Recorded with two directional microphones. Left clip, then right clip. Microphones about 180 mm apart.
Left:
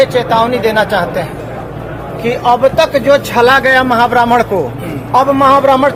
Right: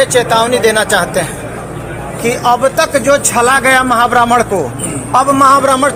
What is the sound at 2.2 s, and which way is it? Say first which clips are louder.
A man's voice: left 1 dB; 15° right (ahead or behind).